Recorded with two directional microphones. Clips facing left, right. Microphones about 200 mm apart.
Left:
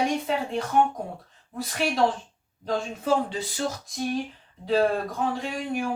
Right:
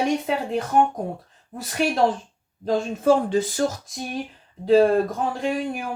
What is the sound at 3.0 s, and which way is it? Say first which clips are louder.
Speech: right 8 dB; 50° right (ahead or behind).